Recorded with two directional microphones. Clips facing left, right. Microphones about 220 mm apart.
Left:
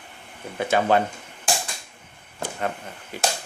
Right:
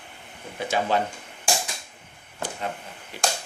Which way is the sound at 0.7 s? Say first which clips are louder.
Left 4 dB; 55° left (ahead or behind).